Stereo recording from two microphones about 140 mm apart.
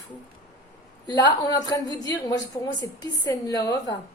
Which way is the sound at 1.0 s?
30° left (ahead or behind).